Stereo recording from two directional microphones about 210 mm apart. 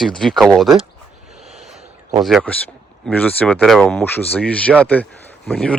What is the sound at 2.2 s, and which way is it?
Speech, centre (ahead or behind).